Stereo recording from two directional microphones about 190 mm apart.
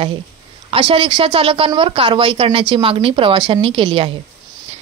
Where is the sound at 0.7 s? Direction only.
30° right (ahead or behind).